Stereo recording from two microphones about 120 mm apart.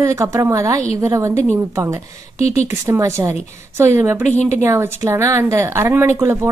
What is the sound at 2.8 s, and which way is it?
Speech, 25° right (ahead or behind).